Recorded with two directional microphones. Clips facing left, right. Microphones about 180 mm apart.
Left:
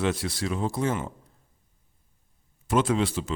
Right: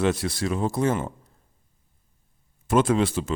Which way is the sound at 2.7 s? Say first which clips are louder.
Right 3 dB; 50° right (ahead or behind).